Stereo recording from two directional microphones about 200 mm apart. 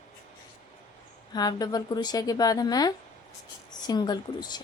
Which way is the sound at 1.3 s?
20° left (ahead or behind).